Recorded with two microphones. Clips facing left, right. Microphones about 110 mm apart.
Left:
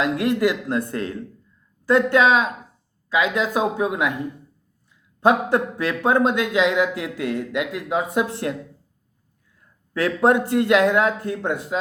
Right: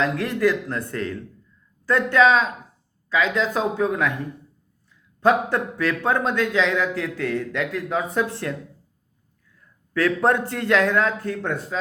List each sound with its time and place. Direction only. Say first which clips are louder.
0.0 s speech: left 1 dB; 15° left (ahead or behind)
5.2 s speech: left 1 dB; 15° left (ahead or behind)
9.9 s speech: left 2 dB; 20° left (ahead or behind)